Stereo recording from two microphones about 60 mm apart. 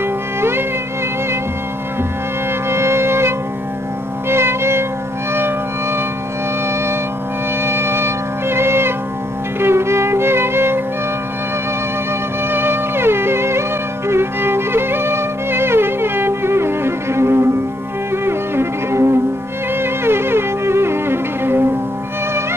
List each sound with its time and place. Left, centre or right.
0.4 s music: right
2.7 s music: right
7.6 s music: right
12.4 s music: right